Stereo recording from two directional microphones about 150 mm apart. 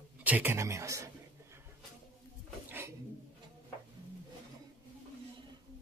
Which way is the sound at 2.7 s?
15° right (ahead or behind).